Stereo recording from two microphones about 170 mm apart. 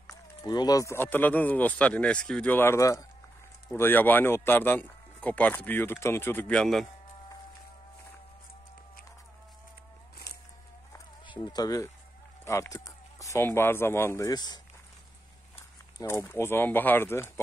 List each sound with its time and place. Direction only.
0.4 s speech: 20° left (ahead or behind); by 6.9 s centre (ahead or behind)
11.2 s speech: 25° left (ahead or behind)
16.0 s speech: 15° left (ahead or behind)